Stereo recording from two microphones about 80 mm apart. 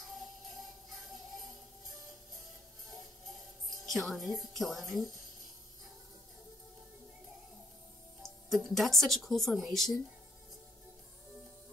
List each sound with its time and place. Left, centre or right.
0.1 s music: centre
3.8 s speech: centre
8.2 s speech: centre